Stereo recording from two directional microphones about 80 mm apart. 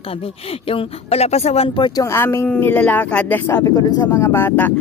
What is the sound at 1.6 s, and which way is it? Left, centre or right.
Speech, left.